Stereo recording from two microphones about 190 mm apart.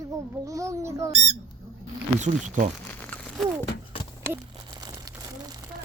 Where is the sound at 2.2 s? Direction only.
40° right (ahead or behind).